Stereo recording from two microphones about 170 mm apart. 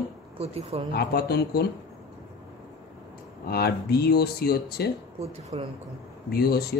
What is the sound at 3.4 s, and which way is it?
Speech, 70° left (ahead or behind).